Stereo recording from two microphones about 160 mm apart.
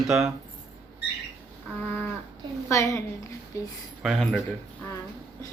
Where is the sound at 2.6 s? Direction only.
20° left (ahead or behind).